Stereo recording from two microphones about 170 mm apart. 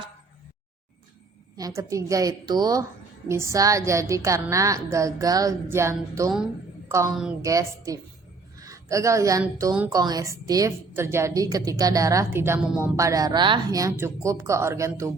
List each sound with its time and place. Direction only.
1.5 s a woman's voice: 20° right (ahead or behind)